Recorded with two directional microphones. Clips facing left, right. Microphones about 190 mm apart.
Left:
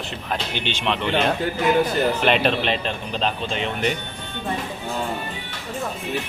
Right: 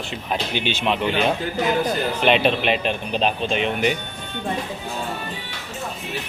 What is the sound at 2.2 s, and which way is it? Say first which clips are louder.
Speech: right 5 dB; centre (ahead or behind).